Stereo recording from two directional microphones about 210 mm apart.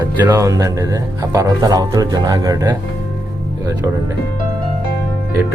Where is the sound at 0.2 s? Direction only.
10° right (ahead or behind).